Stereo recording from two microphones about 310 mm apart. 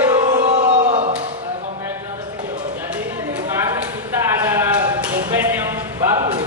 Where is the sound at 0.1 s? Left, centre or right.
Centre.